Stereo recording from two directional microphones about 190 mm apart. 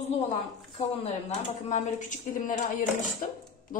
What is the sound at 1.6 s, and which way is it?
A woman's voice, 40° left (ahead or behind).